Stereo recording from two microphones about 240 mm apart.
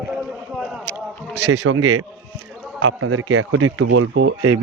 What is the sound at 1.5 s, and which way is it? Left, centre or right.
Speech, right.